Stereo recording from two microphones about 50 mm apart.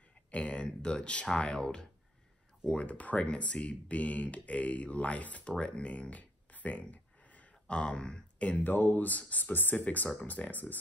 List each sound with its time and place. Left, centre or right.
0.3 s speech: left
8.6 s speech: left